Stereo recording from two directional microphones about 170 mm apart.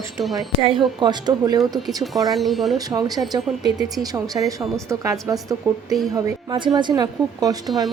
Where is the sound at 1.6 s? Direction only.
Centre (ahead or behind).